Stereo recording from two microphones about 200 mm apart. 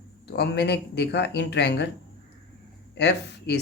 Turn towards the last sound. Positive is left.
turn(degrees=55)  # may be behind; listen again after turning